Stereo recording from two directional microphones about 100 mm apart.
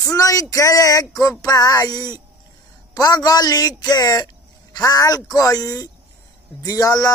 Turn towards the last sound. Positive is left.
turn(degrees=35)  # may be behind; listen again after turning